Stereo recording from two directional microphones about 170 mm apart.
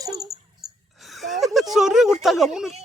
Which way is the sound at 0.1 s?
Centre (ahead or behind).